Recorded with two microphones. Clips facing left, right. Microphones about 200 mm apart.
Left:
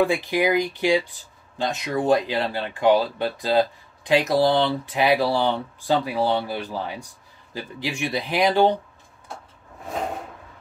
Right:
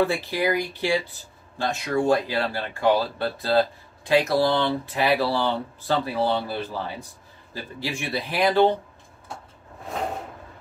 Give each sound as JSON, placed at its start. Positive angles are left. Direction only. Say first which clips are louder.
{"t": 0.0, "sound": "speech", "louder": "left 2 dB", "side_deg": 15}